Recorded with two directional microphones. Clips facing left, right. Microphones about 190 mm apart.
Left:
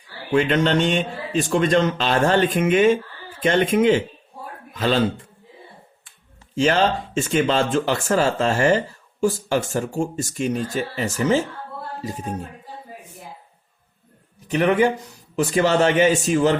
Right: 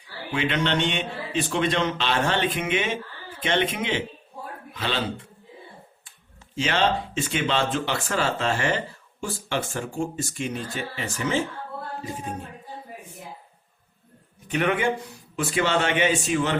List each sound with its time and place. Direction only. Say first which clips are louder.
0.3 s a man's voice: left 6 dB; 45° left (ahead or behind)
6.6 s a man's voice: left 5 dB; 45° left (ahead or behind)
14.4 s speech: left 6 dB; 35° left (ahead or behind)